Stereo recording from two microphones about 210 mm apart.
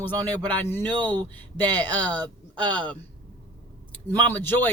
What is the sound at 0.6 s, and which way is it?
Speech, 10° left (ahead or behind).